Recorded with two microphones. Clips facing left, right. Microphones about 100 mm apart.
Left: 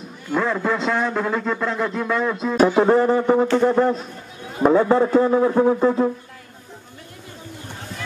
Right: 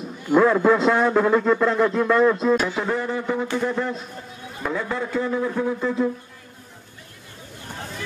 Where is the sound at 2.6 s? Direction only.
40° left (ahead or behind).